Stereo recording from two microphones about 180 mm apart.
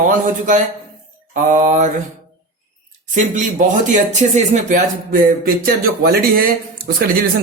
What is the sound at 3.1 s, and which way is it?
Speech, 45° right (ahead or behind).